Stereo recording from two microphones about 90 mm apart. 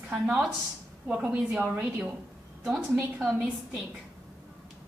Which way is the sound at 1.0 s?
15° right (ahead or behind).